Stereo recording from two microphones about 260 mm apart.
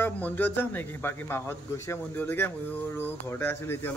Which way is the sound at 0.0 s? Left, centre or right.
Centre.